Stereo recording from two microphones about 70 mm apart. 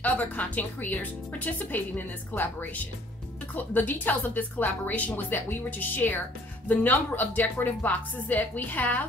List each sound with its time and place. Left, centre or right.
0.0 s speech: left